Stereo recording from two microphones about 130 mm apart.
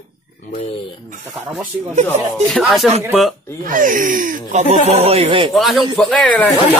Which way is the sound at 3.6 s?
90° right.